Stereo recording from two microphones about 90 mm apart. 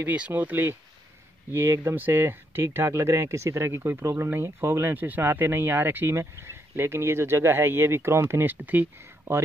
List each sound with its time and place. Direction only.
0.0 s speech: 20° right (ahead or behind)